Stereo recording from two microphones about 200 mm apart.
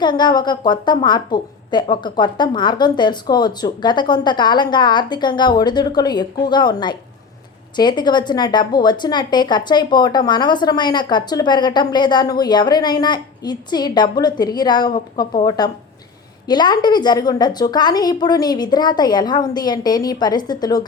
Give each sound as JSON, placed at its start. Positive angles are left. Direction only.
{"t": 0.0, "sound": "a woman's voice", "side_deg": 20}